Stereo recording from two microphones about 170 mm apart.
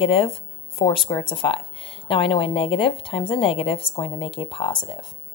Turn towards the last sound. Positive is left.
turn(degrees=25)  # may be behind; listen again after turning